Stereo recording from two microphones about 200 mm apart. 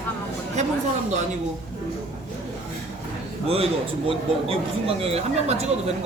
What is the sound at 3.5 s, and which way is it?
A man's voice, 30° right (ahead or behind).